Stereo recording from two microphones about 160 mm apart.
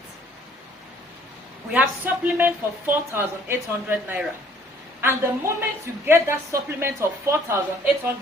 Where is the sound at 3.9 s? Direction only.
15° right (ahead or behind).